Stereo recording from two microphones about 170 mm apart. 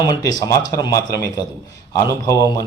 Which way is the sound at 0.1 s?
20° left (ahead or behind).